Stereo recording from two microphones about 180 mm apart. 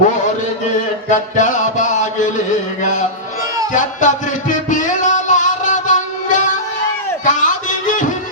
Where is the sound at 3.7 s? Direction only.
45° left (ahead or behind).